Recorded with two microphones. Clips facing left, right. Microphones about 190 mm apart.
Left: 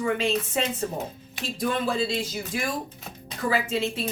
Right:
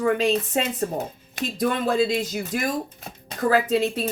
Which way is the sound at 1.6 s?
45° right (ahead or behind).